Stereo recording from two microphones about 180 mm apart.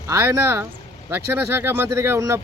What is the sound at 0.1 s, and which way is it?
Speech, 15° right (ahead or behind).